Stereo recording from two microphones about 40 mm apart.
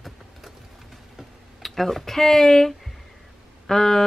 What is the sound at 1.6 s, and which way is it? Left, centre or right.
Speech, centre.